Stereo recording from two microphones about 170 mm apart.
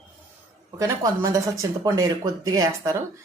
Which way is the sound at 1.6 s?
20° right (ahead or behind).